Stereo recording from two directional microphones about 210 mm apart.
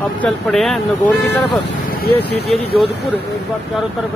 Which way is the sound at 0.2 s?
Centre (ahead or behind).